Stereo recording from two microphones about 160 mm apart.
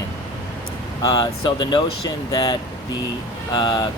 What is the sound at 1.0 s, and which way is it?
Speech, 25° left (ahead or behind).